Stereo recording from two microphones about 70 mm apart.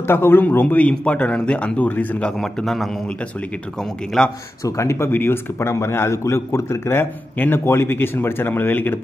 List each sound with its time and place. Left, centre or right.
0.0 s speech: left
2.3 s a man's voice: centre
4.2 s a man's voice: centre
4.6 s a man's voice: left